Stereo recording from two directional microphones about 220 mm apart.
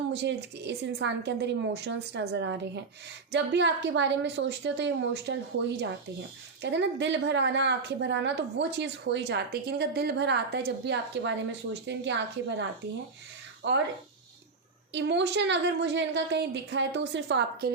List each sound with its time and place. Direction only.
0.1 s a woman's voice: 50° right (ahead or behind)
6.6 s a woman's voice: 50° right (ahead or behind)
13.6 s a woman's voice: 55° right (ahead or behind)
14.9 s a woman's voice: 55° right (ahead or behind)